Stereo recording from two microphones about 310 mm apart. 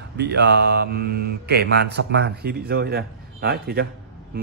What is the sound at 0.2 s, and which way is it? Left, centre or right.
Speech, right.